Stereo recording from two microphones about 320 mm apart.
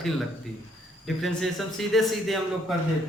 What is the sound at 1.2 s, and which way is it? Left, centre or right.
A man's voice, centre.